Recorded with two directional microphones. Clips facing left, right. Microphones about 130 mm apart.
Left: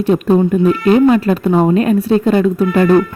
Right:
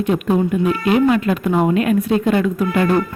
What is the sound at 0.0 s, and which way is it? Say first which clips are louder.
A woman's voice: left 5 dB; 35° left (ahead or behind).